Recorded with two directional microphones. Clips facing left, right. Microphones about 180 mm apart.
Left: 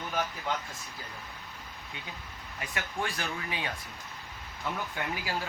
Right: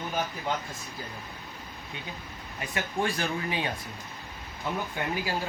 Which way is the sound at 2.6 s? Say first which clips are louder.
Right 5 dB; 30° right (ahead or behind).